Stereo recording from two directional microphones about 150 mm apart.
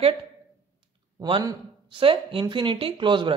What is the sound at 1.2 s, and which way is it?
Speech, 30° right (ahead or behind).